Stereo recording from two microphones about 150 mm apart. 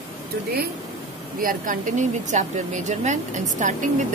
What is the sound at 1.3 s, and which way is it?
Speech, 65° right (ahead or behind).